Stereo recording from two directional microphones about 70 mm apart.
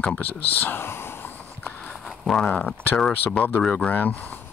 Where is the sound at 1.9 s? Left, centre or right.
Centre.